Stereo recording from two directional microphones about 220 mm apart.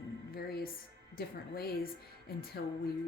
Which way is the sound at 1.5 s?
45° left (ahead or behind).